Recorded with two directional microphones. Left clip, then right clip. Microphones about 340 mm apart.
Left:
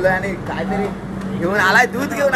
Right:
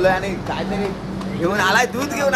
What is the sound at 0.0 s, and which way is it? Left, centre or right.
A man's voice, centre.